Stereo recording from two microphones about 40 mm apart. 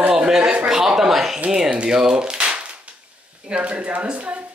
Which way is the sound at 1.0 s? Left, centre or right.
Centre.